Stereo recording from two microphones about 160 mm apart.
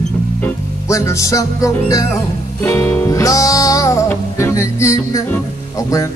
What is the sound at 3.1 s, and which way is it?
Music, 20° left (ahead or behind).